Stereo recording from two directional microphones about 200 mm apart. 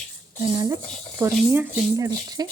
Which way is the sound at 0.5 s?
20° right (ahead or behind).